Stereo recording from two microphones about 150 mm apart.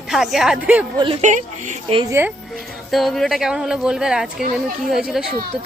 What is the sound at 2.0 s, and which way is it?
Speech, 15° right (ahead or behind).